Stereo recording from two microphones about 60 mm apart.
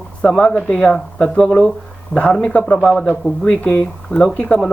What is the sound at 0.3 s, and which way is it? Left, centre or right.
Speech, centre.